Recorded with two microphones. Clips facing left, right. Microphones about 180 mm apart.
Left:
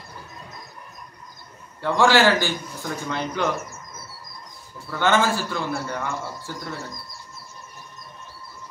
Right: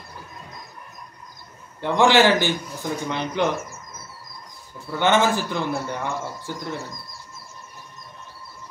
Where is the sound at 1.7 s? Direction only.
20° right (ahead or behind).